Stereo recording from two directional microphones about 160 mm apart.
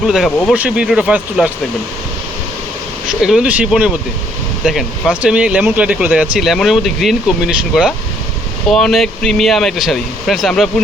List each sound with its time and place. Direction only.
0.0 s speech: centre (ahead or behind)
3.1 s speech: 5° right (ahead or behind)